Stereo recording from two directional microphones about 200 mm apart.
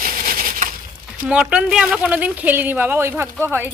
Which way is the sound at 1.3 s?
5° right (ahead or behind).